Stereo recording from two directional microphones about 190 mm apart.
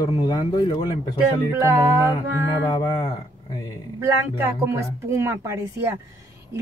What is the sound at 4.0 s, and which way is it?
Speech, 10° right (ahead or behind).